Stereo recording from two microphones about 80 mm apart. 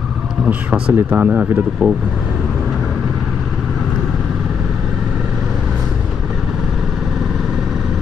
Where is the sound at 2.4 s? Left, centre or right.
Centre.